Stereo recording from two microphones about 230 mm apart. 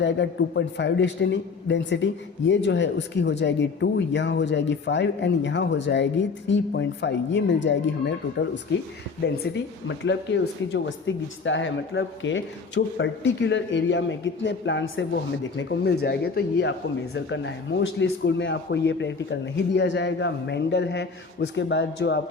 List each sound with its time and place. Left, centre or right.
0.0 s speech: left